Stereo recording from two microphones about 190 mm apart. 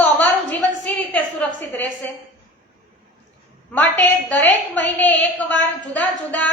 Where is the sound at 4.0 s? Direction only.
10° left (ahead or behind).